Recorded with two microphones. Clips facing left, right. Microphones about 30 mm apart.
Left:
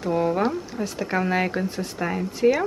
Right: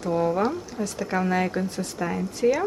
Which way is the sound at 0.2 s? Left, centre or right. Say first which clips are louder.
Even; centre.